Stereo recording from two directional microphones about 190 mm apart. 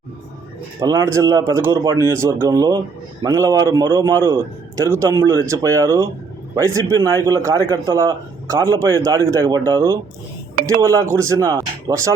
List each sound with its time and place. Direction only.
0.8 s a man's voice: 20° right (ahead or behind)